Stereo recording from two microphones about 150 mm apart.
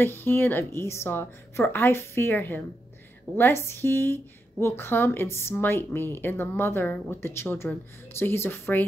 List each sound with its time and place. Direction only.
0.0 s a woman's voice: 15° left (ahead or behind)